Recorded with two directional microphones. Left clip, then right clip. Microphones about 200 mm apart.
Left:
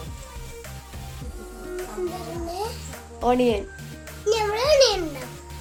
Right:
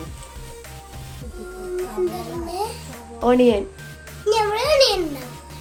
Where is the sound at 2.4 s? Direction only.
Centre (ahead or behind).